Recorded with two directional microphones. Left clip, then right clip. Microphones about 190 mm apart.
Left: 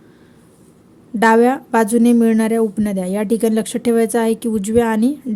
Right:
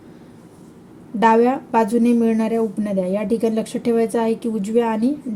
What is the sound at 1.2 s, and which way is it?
Speech, 45° left (ahead or behind).